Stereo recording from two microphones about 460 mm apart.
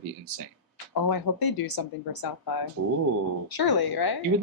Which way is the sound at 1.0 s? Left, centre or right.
Left.